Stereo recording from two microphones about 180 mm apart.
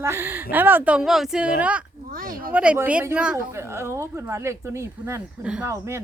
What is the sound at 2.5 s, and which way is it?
A woman's voice, 5° right (ahead or behind).